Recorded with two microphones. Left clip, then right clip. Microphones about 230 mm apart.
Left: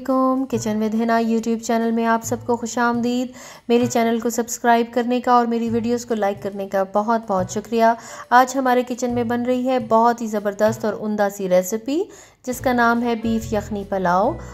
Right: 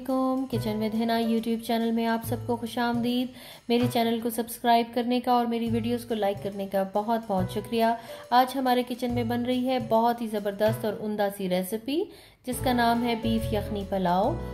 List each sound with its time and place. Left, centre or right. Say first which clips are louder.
0.1 s a woman's voice: left 8 dB; left